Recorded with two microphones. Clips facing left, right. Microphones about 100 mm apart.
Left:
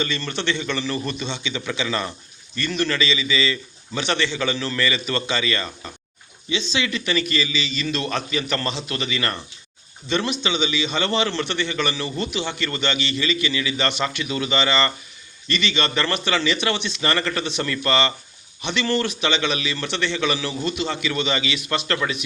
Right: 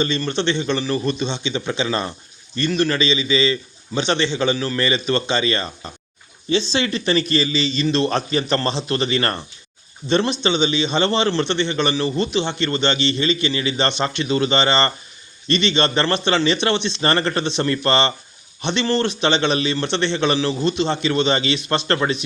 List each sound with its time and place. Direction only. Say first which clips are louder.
0.3 s a man's voice: right 5 dB; 25° right (ahead or behind)
6.5 s a man's voice: right 5 dB; 40° right (ahead or behind)